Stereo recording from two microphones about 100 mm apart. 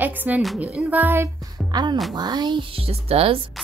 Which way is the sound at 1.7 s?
50° right (ahead or behind).